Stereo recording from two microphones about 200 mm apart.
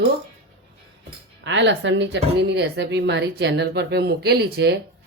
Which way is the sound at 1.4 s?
65° right (ahead or behind).